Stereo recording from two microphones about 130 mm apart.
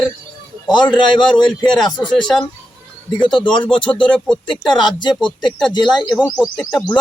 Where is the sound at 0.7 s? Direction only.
35° left (ahead or behind).